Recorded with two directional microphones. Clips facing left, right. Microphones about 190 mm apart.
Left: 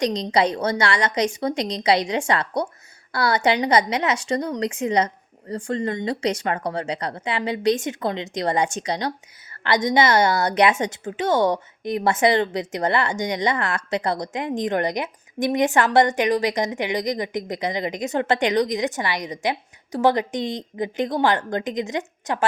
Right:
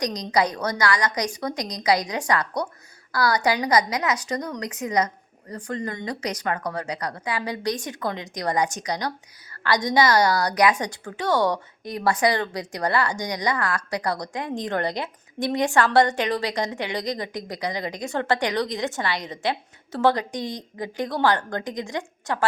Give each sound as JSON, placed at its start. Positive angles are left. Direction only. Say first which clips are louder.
{"t": 0.0, "sound": "speech", "louder": "left 3 dB", "side_deg": 25}